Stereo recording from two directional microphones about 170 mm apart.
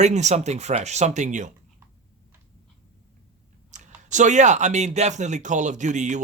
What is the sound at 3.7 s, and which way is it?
Speech, 45° right (ahead or behind).